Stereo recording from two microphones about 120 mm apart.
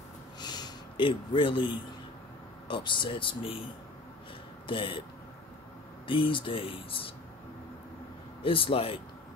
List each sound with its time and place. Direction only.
0.4 s gasp: 35° left (ahead or behind)
2.7 s speech: 40° left (ahead or behind)
4.6 s speech: 45° left (ahead or behind)
6.0 s speech: 45° left (ahead or behind)
8.4 s speech: 50° left (ahead or behind)